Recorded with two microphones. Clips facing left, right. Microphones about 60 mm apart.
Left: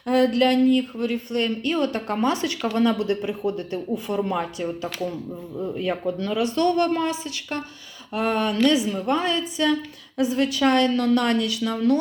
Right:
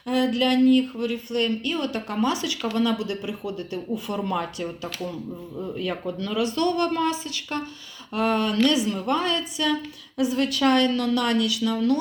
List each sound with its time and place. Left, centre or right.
0.0 s a sound: left
0.9 s speech: left; by 5.8 s centre
5.8 s speech: left